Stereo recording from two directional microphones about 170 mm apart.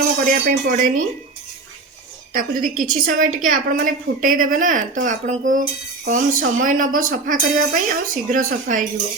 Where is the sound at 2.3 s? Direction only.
55° right (ahead or behind).